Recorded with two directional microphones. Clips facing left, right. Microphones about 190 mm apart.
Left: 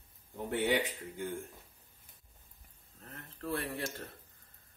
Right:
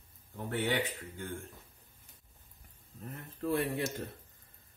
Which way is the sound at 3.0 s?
15° right (ahead or behind).